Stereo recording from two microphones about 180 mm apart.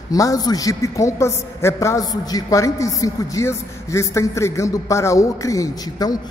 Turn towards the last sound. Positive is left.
turn(degrees=20)  # may be behind; listen again after turning